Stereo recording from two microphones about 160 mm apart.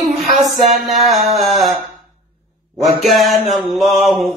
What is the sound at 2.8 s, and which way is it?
Speech, centre (ahead or behind).